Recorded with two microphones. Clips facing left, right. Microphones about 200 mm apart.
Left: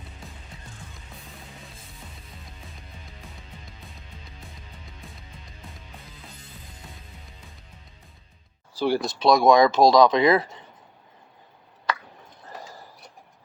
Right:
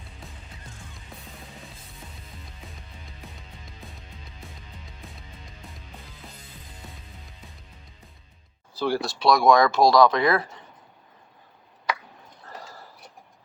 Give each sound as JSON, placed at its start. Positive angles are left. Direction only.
{"t": 8.7, "sound": "speech", "side_deg": 15}